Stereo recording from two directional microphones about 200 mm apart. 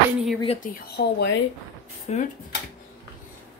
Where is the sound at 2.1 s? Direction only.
35° left (ahead or behind).